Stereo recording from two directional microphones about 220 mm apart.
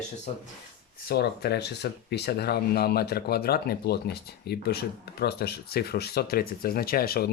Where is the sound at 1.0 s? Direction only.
45° left (ahead or behind).